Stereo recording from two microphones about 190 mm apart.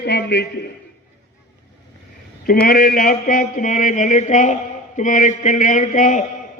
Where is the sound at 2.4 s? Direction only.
50° left (ahead or behind).